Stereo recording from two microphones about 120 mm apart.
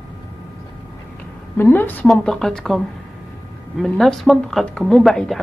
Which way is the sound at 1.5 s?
20° left (ahead or behind).